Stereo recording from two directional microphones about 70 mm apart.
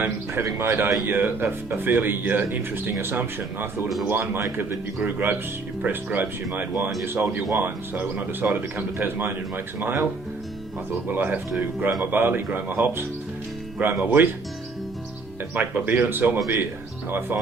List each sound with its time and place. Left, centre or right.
0.6 s speech: right
11.1 s speech: right
15.5 s speech: right